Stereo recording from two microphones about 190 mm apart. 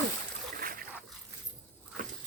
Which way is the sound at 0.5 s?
50° right (ahead or behind).